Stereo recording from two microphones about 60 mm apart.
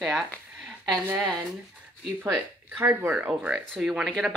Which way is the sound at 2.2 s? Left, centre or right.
Right.